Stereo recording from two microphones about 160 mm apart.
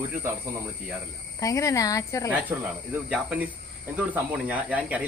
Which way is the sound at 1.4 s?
20° left (ahead or behind).